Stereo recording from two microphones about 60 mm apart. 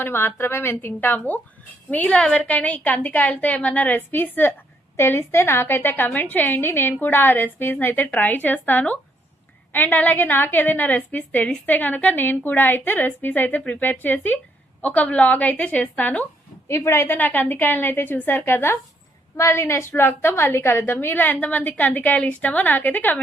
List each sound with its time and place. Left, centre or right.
0.0 s a woman's voice: left
16.6 s a woman's voice: left
17.1 s a woman's voice: left
19.4 s a woman's voice: left
19.9 s a woman's voice: left